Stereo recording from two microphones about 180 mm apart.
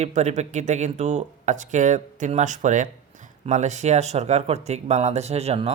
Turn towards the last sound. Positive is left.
turn(degrees=-35)  # may be behind; listen again after turning